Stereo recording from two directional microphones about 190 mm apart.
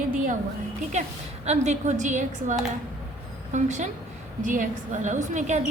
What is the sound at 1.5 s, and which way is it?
A woman's voice, 35° right (ahead or behind).